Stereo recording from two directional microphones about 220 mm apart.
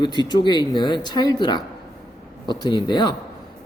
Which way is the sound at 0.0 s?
20° left (ahead or behind).